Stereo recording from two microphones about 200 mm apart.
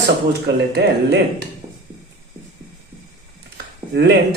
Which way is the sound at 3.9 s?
55° right (ahead or behind).